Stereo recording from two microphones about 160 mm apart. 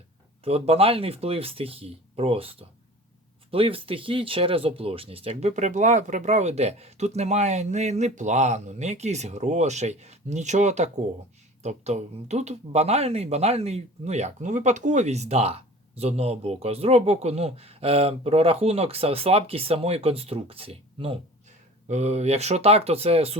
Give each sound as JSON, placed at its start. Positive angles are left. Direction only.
{"t": 0.4, "sound": "speech", "side_deg": -40}